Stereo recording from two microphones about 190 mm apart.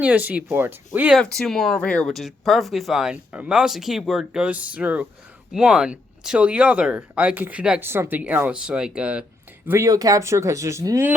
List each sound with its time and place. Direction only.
0.0 s speech: 10° right (ahead or behind)